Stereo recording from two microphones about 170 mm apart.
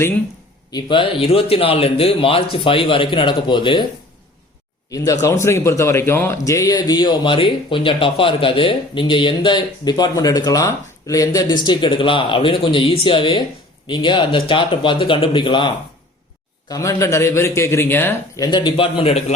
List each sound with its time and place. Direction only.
0.7 s a man's voice: 30° left (ahead or behind)
5.2 s a man's voice: 15° left (ahead or behind)
18.5 s a man's voice: 30° left (ahead or behind)